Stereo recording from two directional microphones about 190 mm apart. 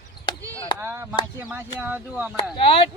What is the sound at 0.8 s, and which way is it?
Speech, 10° right (ahead or behind).